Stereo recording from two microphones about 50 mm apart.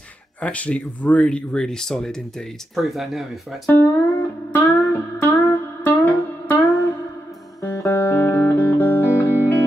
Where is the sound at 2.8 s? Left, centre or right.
Centre.